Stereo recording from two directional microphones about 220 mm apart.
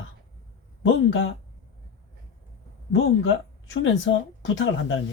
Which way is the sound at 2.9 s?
60° left (ahead or behind).